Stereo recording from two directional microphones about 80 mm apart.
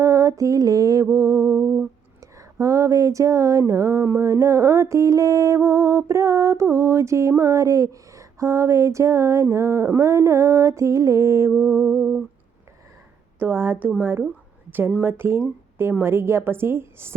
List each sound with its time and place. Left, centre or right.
0.0 s mantra: right
1.0 s music: right
2.2 s a sound: right
11.5 s music: right
13.4 s a woman's voice: right